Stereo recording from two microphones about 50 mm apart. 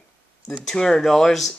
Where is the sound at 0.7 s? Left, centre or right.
Centre.